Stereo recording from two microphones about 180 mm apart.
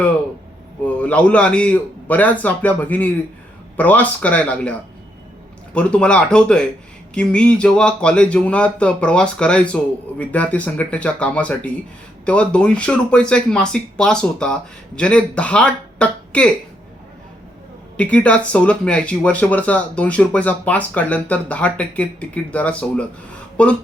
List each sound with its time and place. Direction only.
0.9 s speech: 5° left (ahead or behind)
5.7 s speech: 5° left (ahead or behind)
17.9 s speech: 5° left (ahead or behind)